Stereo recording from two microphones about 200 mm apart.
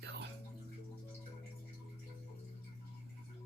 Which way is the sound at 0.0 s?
60° right (ahead or behind).